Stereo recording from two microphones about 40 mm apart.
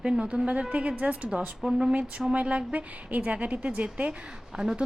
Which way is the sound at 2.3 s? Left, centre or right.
Right.